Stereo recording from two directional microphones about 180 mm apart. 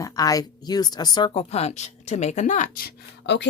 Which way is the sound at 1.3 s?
35° left (ahead or behind).